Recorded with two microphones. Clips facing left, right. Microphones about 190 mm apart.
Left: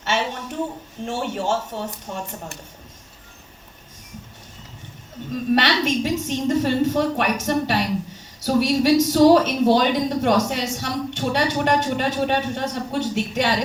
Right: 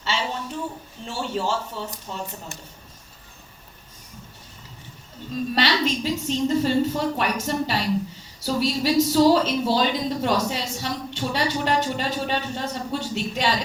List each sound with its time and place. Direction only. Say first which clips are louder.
0.0 s a sound: left 3 dB; 50° left (ahead or behind)
1.0 s speech: left 2 dB; 55° left (ahead or behind)
5.3 s a woman's voice: left 3 dB; 60° left (ahead or behind)